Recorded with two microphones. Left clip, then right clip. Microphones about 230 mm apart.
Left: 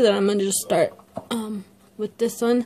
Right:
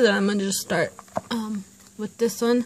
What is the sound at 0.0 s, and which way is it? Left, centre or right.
Speech, right.